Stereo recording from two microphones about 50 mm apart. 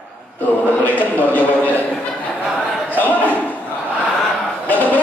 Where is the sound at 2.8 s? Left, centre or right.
Left.